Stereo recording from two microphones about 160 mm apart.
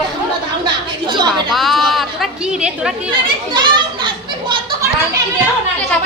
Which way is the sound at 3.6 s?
30° right (ahead or behind).